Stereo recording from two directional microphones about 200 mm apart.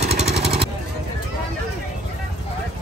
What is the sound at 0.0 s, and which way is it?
Vehicle, 35° right (ahead or behind).